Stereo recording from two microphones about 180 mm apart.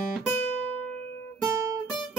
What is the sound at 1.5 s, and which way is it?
Music, 15° right (ahead or behind).